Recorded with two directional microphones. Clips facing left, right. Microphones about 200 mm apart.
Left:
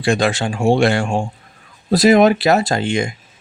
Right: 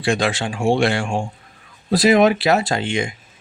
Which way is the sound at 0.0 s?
45° left (ahead or behind).